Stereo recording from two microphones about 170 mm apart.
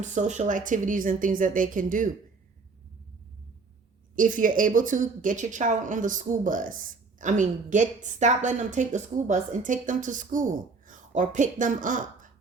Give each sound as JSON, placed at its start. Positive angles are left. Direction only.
{"t": 0.0, "sound": "speech", "side_deg": -45}
{"t": 4.1, "sound": "speech", "side_deg": -50}